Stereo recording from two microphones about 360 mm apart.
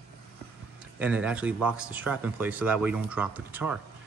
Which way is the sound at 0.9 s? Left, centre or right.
Centre.